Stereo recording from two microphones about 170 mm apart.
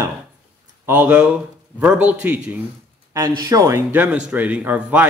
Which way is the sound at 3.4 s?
20° right (ahead or behind).